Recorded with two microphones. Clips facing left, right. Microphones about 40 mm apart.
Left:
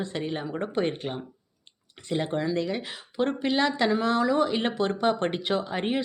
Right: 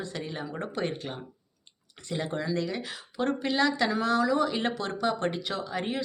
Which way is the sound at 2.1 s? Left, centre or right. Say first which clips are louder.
Left 4 dB; left.